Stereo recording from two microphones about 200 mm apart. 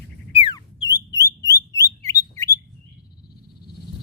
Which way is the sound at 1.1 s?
15° left (ahead or behind).